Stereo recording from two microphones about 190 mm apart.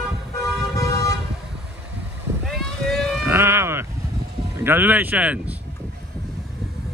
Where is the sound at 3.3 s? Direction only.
15° right (ahead or behind).